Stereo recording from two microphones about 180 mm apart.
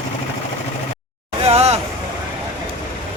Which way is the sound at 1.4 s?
35° right (ahead or behind).